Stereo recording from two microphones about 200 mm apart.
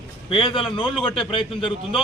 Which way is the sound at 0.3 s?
25° left (ahead or behind).